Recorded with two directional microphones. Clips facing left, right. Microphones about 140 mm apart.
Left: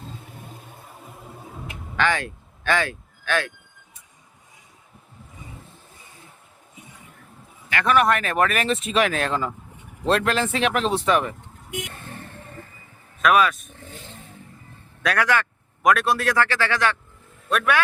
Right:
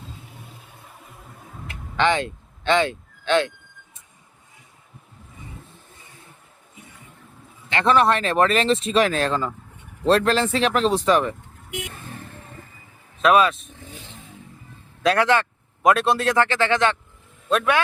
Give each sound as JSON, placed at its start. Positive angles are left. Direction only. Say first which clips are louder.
{"t": 2.0, "sound": "speech", "louder": "right 3 dB", "side_deg": -20}
{"t": 7.7, "sound": "speech", "louder": "right 1 dB", "side_deg": -30}
{"t": 13.2, "sound": "a man's voice", "louder": "right 2 dB", "side_deg": -25}
{"t": 15.0, "sound": "a man's voice", "louder": "right 3 dB", "side_deg": -25}